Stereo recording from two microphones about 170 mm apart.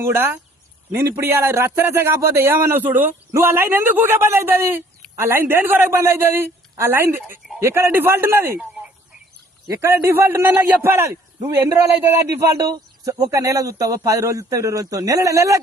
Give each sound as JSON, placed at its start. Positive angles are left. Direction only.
{"t": 0.1, "sound": "a man's voice", "side_deg": -15}
{"t": 9.6, "sound": "a man's voice", "side_deg": -15}